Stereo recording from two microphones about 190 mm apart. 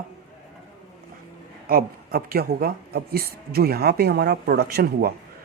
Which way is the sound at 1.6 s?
50° right (ahead or behind).